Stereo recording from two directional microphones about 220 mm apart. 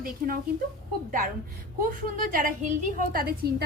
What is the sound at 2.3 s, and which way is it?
A woman's voice, 35° right (ahead or behind).